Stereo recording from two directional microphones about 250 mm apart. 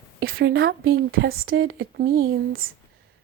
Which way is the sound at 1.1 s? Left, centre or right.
Right.